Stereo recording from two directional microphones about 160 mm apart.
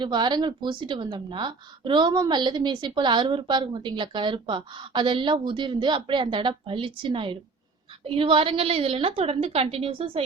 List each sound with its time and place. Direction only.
0.0 s a woman's voice: 30° right (ahead or behind)